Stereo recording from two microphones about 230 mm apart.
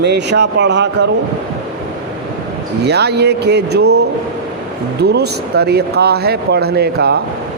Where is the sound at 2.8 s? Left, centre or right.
Right.